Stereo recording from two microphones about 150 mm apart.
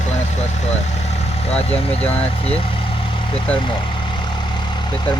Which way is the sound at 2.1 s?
40° left (ahead or behind).